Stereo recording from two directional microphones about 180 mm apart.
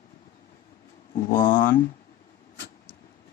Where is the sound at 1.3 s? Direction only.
50° left (ahead or behind).